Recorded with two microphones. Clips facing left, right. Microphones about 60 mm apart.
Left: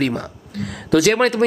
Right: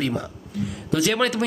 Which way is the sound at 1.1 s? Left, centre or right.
Left.